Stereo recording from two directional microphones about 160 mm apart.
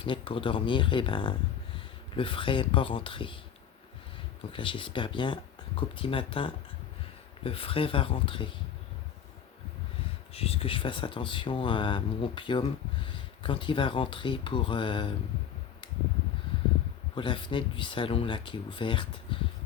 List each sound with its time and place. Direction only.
0.0 s speech: 35° left (ahead or behind)
4.5 s speech: 35° left (ahead or behind)
10.3 s speech: 40° left (ahead or behind)
17.2 s speech: 30° left (ahead or behind)